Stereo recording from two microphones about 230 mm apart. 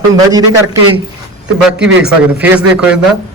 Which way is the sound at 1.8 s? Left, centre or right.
Centre.